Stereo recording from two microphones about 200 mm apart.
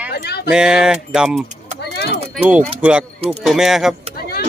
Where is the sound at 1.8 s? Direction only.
55° left (ahead or behind).